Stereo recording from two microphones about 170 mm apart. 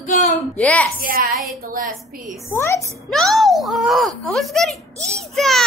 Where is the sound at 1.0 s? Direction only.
60° right (ahead or behind).